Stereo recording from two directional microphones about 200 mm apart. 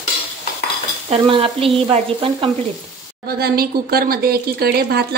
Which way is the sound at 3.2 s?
50° right (ahead or behind).